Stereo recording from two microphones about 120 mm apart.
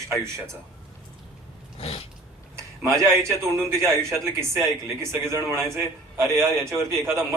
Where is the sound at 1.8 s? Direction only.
50° left (ahead or behind).